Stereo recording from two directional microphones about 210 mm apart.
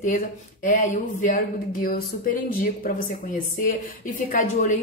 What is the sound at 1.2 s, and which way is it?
Speech, 45° left (ahead or behind).